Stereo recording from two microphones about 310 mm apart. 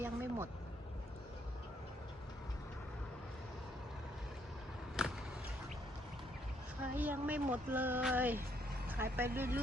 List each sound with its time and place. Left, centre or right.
0.0 s vehicle: centre
5.0 s a sound: centre
6.9 s speech: centre